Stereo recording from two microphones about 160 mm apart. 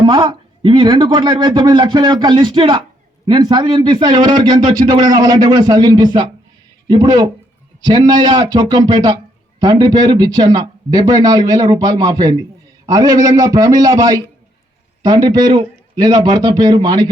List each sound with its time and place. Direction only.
0.0 s a man's voice: 25° right (ahead or behind)